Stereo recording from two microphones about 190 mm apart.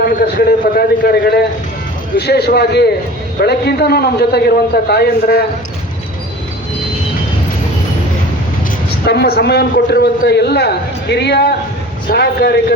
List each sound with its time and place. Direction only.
0.0 s a man's voice: 55° left (ahead or behind)
9.0 s a man's voice: 55° left (ahead or behind)